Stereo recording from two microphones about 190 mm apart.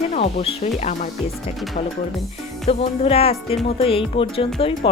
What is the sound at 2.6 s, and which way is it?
Speech, 30° left (ahead or behind).